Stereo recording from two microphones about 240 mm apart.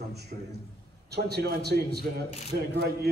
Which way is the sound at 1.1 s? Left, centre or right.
Right.